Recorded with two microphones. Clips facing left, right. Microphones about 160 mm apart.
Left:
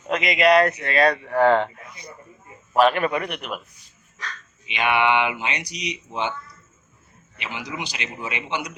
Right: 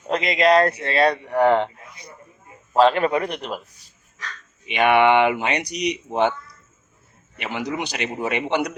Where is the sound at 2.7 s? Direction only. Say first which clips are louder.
Right 2 dB; 25° right (ahead or behind).